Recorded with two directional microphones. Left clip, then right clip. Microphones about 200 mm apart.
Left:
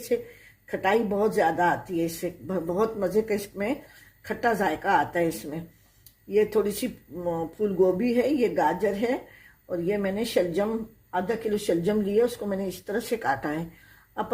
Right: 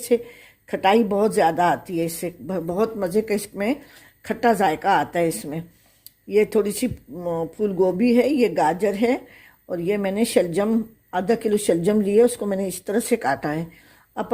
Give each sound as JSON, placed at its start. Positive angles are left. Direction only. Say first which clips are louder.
{"t": 0.1, "sound": "speech", "louder": "right 7 dB", "side_deg": -40}